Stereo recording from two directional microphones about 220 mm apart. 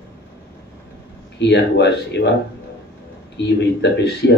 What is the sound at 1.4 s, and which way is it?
Speech, 50° left (ahead or behind).